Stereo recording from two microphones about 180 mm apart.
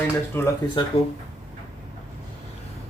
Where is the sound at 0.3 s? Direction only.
15° left (ahead or behind).